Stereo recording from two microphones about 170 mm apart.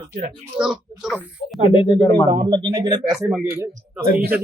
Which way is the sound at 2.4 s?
30° right (ahead or behind).